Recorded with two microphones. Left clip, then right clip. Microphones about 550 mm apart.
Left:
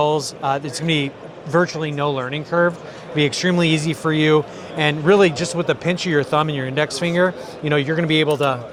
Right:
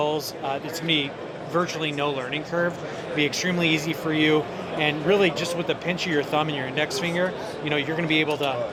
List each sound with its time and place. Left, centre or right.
0.0 s speech: left